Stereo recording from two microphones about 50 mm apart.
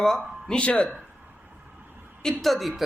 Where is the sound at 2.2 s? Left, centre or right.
Centre.